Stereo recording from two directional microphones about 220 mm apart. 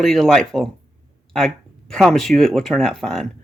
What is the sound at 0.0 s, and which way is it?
Speech, centre (ahead or behind).